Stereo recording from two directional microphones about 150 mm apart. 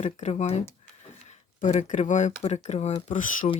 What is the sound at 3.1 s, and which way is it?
Speech, 60° left (ahead or behind).